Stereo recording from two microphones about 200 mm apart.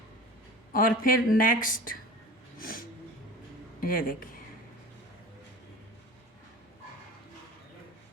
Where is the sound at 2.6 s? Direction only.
45° left (ahead or behind).